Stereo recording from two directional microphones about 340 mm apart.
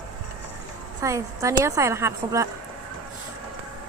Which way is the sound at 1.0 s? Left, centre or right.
Centre.